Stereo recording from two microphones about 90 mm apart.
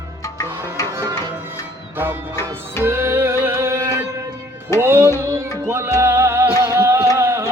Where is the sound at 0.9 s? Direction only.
35° right (ahead or behind).